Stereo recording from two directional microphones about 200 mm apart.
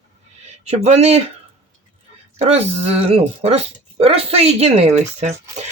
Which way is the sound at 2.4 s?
30° right (ahead or behind).